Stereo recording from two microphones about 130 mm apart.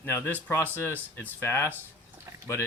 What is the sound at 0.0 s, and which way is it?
Speech, 20° left (ahead or behind).